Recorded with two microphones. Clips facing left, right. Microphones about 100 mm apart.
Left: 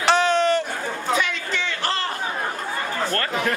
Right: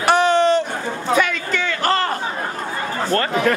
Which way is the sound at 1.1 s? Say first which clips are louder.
Right 7 dB; 50° right (ahead or behind).